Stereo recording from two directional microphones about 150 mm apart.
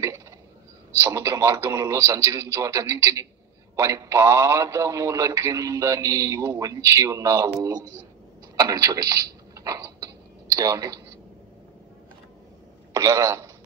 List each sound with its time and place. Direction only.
1.0 s a man's voice: 20° right (ahead or behind)
8.5 s a man's voice: 25° right (ahead or behind)
12.9 s a man's voice: 25° right (ahead or behind)